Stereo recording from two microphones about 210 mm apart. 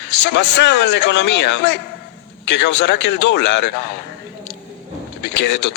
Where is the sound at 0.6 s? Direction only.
55° left (ahead or behind).